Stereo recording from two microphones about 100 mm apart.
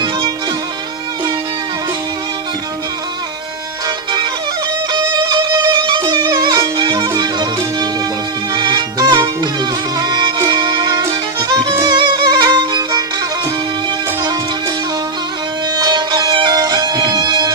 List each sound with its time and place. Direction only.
3.8 s music: 45° right (ahead or behind)
15.7 s music: 45° right (ahead or behind)